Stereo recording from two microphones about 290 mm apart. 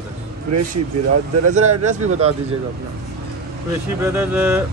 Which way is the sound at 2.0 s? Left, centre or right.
Right.